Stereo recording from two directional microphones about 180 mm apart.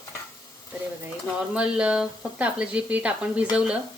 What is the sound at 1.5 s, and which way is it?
Speech, 5° right (ahead or behind).